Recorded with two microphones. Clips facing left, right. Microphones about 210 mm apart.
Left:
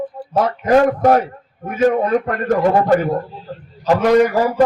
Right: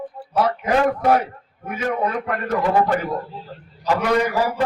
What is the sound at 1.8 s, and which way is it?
A man's voice, 45° left (ahead or behind).